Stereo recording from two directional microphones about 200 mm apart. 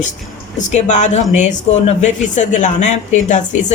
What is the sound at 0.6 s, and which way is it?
A woman's voice, 35° left (ahead or behind).